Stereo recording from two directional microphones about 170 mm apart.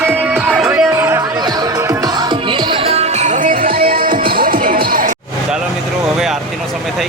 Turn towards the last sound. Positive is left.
turn(degrees=-55)  # may be behind; listen again after turning